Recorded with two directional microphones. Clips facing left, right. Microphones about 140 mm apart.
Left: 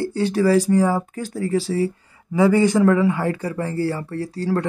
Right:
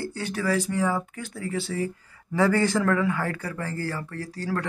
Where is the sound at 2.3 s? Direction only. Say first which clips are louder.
Left 6 dB; 15° left (ahead or behind).